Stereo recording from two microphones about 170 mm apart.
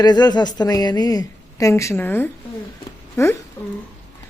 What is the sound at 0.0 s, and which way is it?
A woman's voice, 25° left (ahead or behind).